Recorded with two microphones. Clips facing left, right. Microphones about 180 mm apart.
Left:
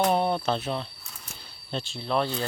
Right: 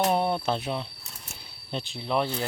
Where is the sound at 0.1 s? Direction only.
5° right (ahead or behind).